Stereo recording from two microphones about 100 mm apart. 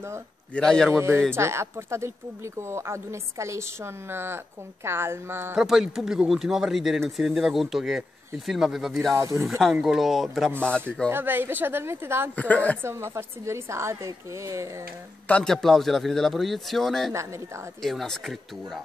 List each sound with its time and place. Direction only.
0.6 s speech: 5° left (ahead or behind)
0.9 s a woman's voice: 25° right (ahead or behind)
5.6 s speech: 5° right (ahead or behind)
9.1 s a woman's voice: 30° right (ahead or behind)
9.5 s speech: centre (ahead or behind)
11.1 s a woman's voice: 20° right (ahead or behind)
12.4 s speech: 15° left (ahead or behind)
12.8 s a woman's voice: 25° right (ahead or behind)
15.2 s speech: 10° left (ahead or behind)